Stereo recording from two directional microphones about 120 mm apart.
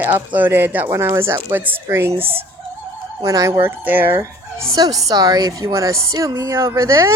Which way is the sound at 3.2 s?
30° right (ahead or behind).